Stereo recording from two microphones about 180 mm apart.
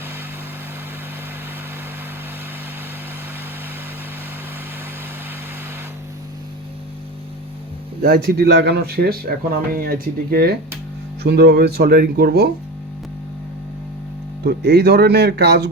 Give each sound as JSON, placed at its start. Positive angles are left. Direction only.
{"t": 8.0, "sound": "speech", "side_deg": -55}
{"t": 14.4, "sound": "speech", "side_deg": -65}